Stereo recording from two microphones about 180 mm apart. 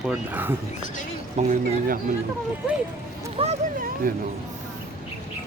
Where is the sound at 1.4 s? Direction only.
40° right (ahead or behind).